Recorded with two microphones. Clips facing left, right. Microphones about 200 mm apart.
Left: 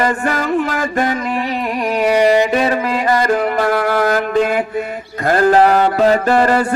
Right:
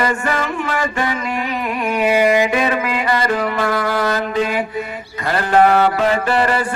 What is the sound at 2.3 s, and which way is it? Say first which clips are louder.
Music: left 2 dB; 35° left (ahead or behind).